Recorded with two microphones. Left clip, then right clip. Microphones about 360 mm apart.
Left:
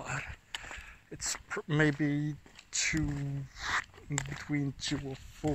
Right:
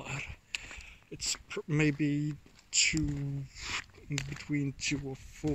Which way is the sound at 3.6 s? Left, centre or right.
Centre.